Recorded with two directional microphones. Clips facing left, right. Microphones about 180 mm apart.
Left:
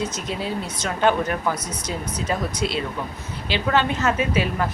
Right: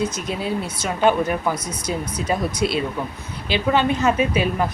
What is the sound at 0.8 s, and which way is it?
A woman's voice, 10° right (ahead or behind).